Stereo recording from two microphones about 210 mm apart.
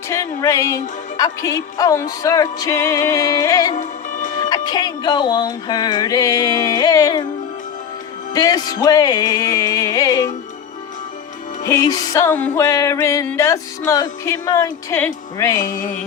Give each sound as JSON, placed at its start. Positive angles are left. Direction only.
{"t": 0.1, "sound": "music", "side_deg": 15}
{"t": 3.8, "sound": "music", "side_deg": 35}
{"t": 4.4, "sound": "music", "side_deg": 20}
{"t": 8.3, "sound": "music", "side_deg": 15}
{"t": 11.6, "sound": "music", "side_deg": 15}